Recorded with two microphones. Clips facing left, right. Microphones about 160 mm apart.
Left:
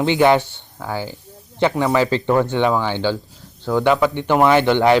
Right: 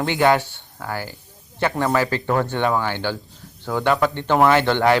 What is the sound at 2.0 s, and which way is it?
Speech, 20° left (ahead or behind).